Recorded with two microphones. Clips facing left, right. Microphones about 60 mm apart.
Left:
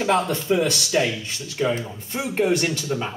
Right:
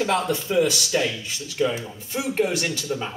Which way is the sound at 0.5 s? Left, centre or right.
Centre.